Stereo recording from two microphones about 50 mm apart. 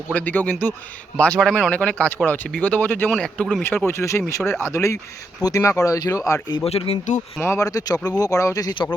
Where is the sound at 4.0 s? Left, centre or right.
Left.